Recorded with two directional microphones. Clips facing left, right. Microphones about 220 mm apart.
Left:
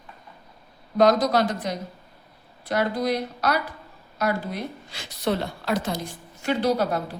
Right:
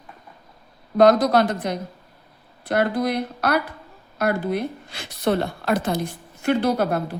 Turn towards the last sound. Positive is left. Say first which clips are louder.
# right 2 dB
turn(degrees=-55)  # may be behind; listen again after turning